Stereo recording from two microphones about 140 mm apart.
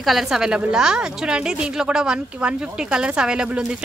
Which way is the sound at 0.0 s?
Centre (ahead or behind).